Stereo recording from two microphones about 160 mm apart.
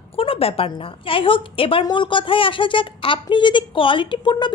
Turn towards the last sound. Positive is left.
turn(degrees=30)  # may be behind; listen again after turning